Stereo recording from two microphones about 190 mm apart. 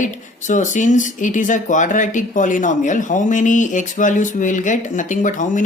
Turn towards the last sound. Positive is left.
turn(degrees=40)  # may be behind; listen again after turning